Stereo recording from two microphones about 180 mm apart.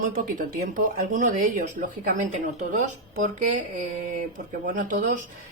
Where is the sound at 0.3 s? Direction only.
50° right (ahead or behind).